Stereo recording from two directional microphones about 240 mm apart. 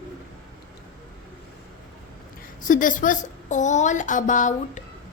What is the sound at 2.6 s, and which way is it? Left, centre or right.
A woman's voice, left.